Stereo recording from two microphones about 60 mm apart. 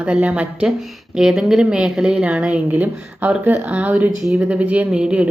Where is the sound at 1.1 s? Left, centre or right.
Centre.